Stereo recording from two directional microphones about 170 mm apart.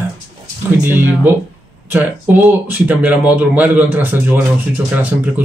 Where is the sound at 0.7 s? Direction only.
10° right (ahead or behind).